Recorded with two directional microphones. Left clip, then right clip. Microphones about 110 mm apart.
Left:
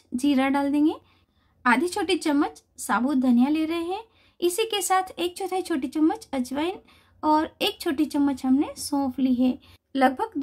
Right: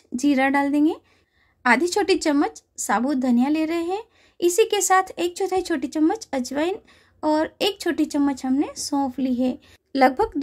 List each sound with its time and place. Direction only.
0.1 s a woman's voice: 35° right (ahead or behind)
1.6 s a woman's voice: 45° right (ahead or behind)